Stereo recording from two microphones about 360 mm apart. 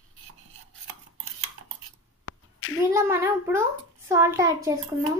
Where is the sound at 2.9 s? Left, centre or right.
Centre.